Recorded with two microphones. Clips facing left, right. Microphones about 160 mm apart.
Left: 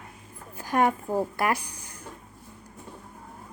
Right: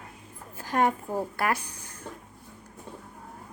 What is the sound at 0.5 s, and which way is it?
Speech, 15° left (ahead or behind).